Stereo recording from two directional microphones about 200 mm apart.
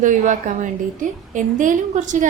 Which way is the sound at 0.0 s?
40° right (ahead or behind).